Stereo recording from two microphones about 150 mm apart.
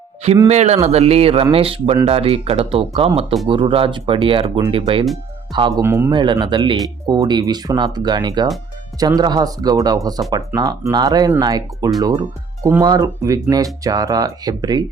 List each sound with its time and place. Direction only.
0.4 s speech: 45° right (ahead or behind); by 5.8 s 30° right (ahead or behind)
5.8 s speech: 15° right (ahead or behind)
6.1 s speech: 30° right (ahead or behind)